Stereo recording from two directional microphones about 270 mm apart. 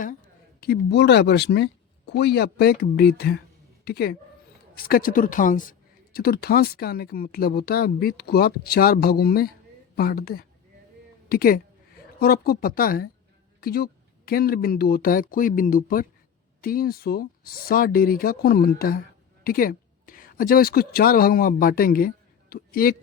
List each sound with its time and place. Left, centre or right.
0.6 s speech: left